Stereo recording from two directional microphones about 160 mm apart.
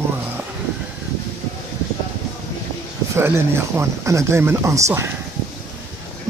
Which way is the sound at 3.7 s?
15° right (ahead or behind).